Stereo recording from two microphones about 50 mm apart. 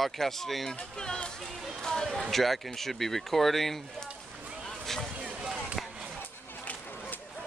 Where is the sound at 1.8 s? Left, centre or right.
Centre.